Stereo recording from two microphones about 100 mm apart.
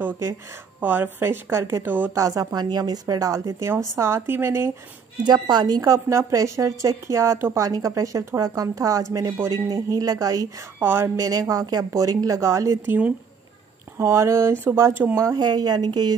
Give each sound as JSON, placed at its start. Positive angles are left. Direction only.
{"t": 0.7, "sound": "speech", "side_deg": -20}
{"t": 2.1, "sound": "a woman's voice", "side_deg": -35}
{"t": 5.2, "sound": "a woman's voice", "side_deg": -45}
{"t": 10.8, "sound": "speech", "side_deg": -25}
{"t": 11.2, "sound": "a woman's voice", "side_deg": -35}
{"t": 12.8, "sound": "speech", "side_deg": -20}
{"t": 13.9, "sound": "a woman's voice", "side_deg": -30}